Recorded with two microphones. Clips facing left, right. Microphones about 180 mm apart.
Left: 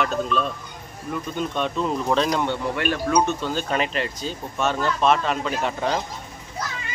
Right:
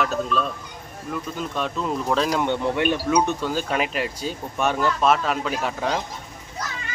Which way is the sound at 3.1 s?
10° right (ahead or behind).